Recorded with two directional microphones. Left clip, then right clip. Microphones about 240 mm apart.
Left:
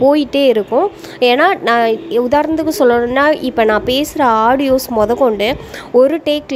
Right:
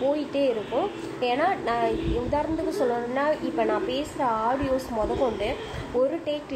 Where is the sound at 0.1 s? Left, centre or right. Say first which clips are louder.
Left 13 dB; left.